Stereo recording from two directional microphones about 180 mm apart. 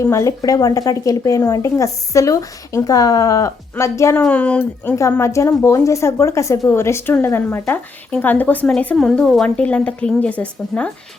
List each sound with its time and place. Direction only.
0.0 s speech: 15° left (ahead or behind)